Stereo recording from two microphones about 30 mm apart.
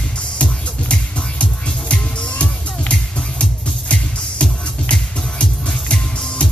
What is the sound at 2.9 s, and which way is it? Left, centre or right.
Music, left.